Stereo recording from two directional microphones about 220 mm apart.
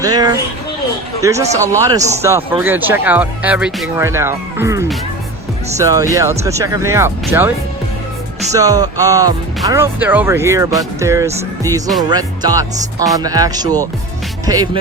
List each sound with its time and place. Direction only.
0.0 s speech: 15° right (ahead or behind)
8.5 s speech: 15° right (ahead or behind)